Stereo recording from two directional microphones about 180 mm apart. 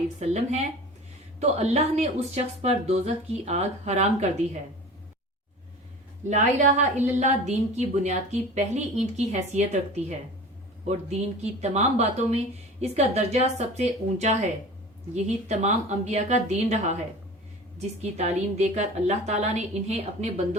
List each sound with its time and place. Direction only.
0.2 s a woman's voice: 40° right (ahead or behind)
6.2 s a woman's voice: 40° right (ahead or behind)
11.3 s a woman's voice: 35° right (ahead or behind)